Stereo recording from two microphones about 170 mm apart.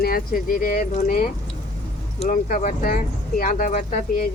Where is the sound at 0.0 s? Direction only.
60° left (ahead or behind).